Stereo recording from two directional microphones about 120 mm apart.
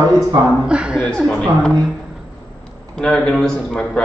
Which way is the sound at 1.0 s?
10° left (ahead or behind).